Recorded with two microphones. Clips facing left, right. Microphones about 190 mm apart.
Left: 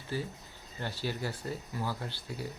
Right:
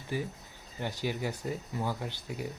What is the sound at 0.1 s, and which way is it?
Speech, 15° right (ahead or behind).